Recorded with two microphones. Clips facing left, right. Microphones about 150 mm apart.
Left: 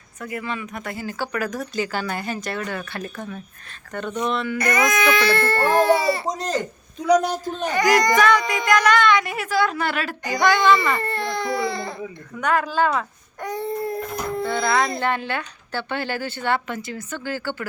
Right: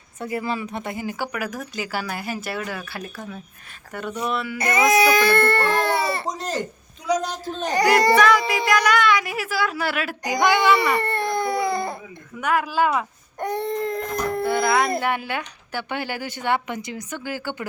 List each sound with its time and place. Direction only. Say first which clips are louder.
0.2 s speech: right 3 dB; 30° right (ahead or behind); by 4.5 s 5° right (ahead or behind)
4.5 s speech: right 4 dB; 25° right (ahead or behind); by 6.2 s 60° right (ahead or behind)
7.1 s a man's voice: left 5 dB; 60° left (ahead or behind)
7.6 s a child's voice: right 1 dB; 35° right (ahead or behind)
8.2 s a woman's voice: even; 5° right (ahead or behind)
10.9 s baby cry: right 2 dB; 65° right (ahead or behind)
12.4 s speech: left 1 dB; 10° right (ahead or behind)
13.4 s baby cry: right 2 dB; 65° right (ahead or behind); by 14.4 s 85° right
14.4 s speech: right 1 dB; 5° right (ahead or behind)